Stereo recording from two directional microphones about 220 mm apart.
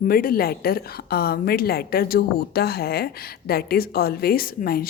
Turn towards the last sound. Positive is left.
turn(degrees=40)  # may be behind; listen again after turning